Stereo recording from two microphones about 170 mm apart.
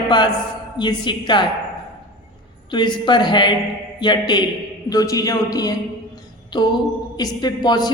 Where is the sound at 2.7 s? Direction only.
25° left (ahead or behind).